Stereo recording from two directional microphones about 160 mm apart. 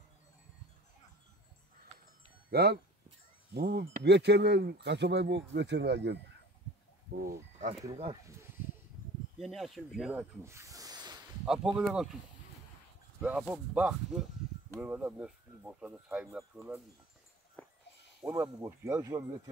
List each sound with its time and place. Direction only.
2.5 s speech: 85° right
7.2 s speech: 60° right (ahead or behind)
9.4 s speech: centre (ahead or behind)
10.4 s snake: 20° right (ahead or behind)
11.4 s speech: 5° right (ahead or behind)
13.2 s speech: 5° right (ahead or behind)
17.6 s a sound: 15° left (ahead or behind)
18.2 s speech: 20° right (ahead or behind)